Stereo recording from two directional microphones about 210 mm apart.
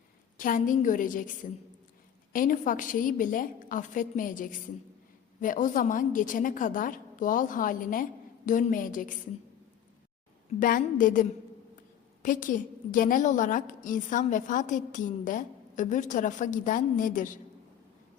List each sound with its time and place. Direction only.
0.3 s a woman's voice: 40° left (ahead or behind)
2.3 s a woman's voice: 40° left (ahead or behind)
10.6 s a woman's voice: 40° left (ahead or behind)